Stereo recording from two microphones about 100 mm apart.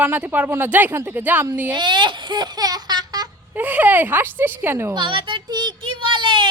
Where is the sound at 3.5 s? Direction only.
15° right (ahead or behind).